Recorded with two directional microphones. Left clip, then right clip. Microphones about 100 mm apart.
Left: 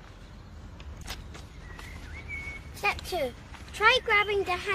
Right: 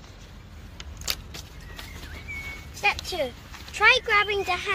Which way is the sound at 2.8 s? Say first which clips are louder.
Right 4 dB; 15° left (ahead or behind).